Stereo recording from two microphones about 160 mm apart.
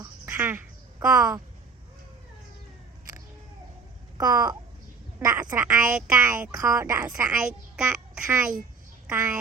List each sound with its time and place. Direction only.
0.0 s a sound: 15° right (ahead or behind)
4.2 s speech: 25° right (ahead or behind)
5.2 s a sound: 15° right (ahead or behind)
5.6 s speech: 5° right (ahead or behind)
6.5 s speech: 20° right (ahead or behind)
7.3 s a child's voice: 5° right (ahead or behind)